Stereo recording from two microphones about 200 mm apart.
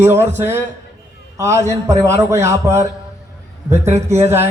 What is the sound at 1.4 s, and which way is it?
A man's voice, 15° right (ahead or behind).